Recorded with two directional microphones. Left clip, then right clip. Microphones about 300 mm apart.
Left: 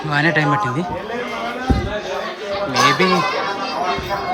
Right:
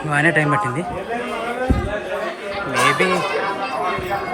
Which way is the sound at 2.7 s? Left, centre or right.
Centre.